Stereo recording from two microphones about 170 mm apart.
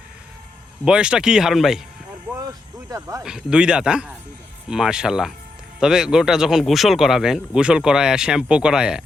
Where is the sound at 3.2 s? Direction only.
5° right (ahead or behind).